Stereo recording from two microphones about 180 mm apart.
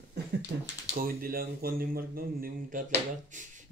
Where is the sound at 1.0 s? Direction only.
55° right (ahead or behind).